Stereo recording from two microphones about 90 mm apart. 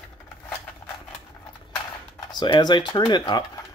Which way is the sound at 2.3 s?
55° left (ahead or behind).